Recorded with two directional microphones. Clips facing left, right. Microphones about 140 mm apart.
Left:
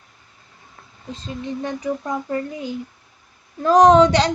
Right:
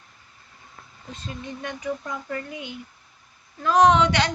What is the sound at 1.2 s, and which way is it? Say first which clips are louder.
A woman's voice: left 7 dB; 35° left (ahead or behind).